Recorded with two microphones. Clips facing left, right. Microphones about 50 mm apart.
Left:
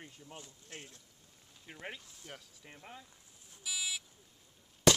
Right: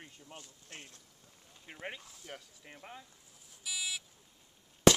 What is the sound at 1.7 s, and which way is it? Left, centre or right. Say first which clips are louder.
Speech: right 2 dB; centre.